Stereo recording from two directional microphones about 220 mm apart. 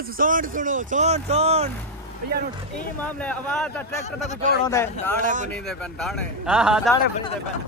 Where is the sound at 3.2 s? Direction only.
5° left (ahead or behind).